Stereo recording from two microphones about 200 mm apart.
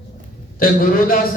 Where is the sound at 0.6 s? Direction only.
45° left (ahead or behind).